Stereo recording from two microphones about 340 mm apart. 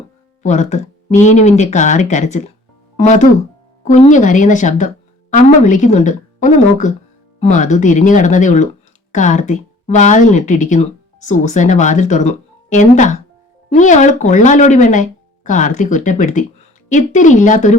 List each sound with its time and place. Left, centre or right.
0.4 s speech: left